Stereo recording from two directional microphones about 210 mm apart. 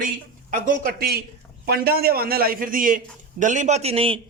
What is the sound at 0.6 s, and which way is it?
A man's voice, 45° right (ahead or behind).